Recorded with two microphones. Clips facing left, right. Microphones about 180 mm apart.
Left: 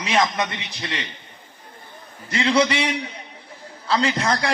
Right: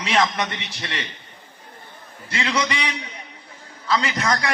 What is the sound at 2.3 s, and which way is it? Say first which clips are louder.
Speech: left 5 dB; 25° left (ahead or behind).